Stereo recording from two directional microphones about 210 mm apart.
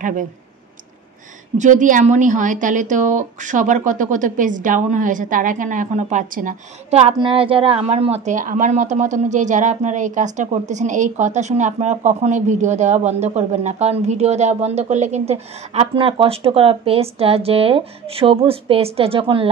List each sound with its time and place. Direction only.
1.6 s a woman's voice: 35° right (ahead or behind)